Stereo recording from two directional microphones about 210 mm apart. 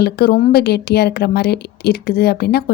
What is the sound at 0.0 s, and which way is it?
A woman's voice, 50° left (ahead or behind).